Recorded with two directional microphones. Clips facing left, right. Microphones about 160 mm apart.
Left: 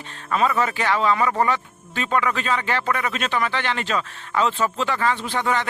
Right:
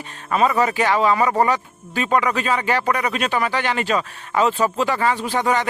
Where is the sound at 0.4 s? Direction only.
15° right (ahead or behind).